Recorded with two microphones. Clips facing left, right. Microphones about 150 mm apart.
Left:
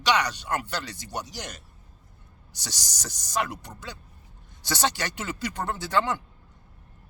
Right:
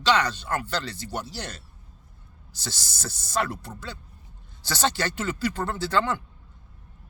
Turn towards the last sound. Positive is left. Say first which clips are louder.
# right 1 dB
turn(degrees=20)  # may be behind; listen again after turning